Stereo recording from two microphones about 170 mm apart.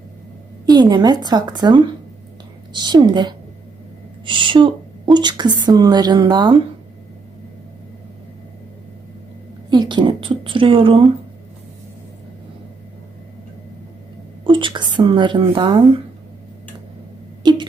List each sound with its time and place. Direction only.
0.6 s speech: 25° right (ahead or behind)
9.6 s a woman's voice: 25° right (ahead or behind)
14.4 s a woman's voice: 30° right (ahead or behind)